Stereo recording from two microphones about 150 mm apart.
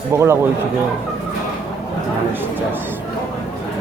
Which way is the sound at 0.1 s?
15° right (ahead or behind).